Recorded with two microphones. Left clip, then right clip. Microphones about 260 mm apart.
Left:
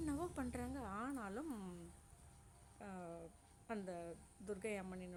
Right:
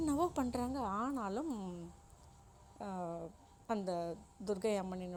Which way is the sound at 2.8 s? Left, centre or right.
Centre.